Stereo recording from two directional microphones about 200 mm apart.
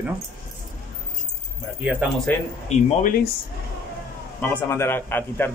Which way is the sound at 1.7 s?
5° right (ahead or behind).